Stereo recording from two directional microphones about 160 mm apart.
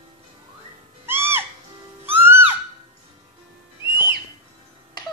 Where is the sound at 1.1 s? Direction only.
15° right (ahead or behind).